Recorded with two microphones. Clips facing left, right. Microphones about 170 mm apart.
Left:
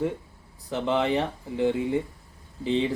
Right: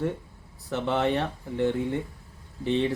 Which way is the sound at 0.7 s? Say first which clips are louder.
Left 1 dB; 15° left (ahead or behind).